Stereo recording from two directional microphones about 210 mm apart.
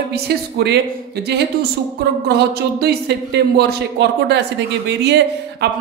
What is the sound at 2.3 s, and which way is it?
Speech, 50° right (ahead or behind).